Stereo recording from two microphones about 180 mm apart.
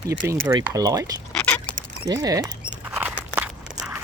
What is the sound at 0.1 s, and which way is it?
Speech, 20° right (ahead or behind).